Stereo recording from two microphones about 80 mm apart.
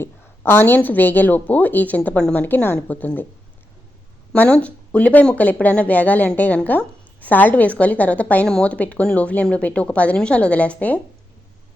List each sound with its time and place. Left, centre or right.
0.0 s speech: left
4.4 s speech: centre